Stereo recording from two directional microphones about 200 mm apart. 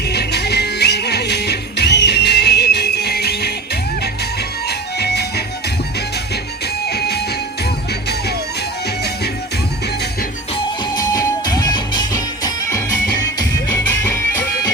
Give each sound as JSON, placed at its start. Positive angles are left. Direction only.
{"t": 0.1, "sound": "music", "side_deg": 55}
{"t": 4.9, "sound": "music", "side_deg": 55}
{"t": 6.8, "sound": "music", "side_deg": 55}
{"t": 10.9, "sound": "music", "side_deg": 20}